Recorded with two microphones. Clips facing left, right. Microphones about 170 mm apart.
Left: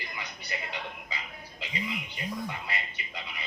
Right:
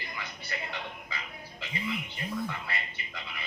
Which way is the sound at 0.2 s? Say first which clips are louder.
Even; 20° left (ahead or behind).